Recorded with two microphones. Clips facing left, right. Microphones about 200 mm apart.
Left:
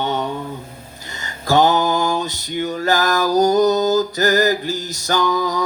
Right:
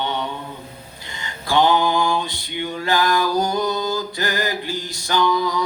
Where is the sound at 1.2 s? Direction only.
45° left (ahead or behind).